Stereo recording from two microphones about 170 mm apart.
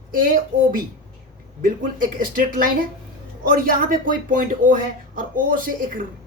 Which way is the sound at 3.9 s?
55° right (ahead or behind).